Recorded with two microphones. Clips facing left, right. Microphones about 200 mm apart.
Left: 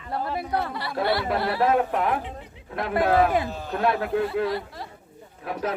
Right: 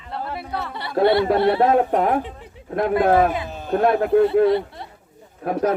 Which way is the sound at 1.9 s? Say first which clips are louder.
Right 5 dB; 40° right (ahead or behind).